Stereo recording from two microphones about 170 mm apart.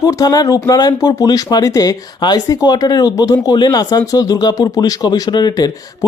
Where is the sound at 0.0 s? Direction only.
20° left (ahead or behind).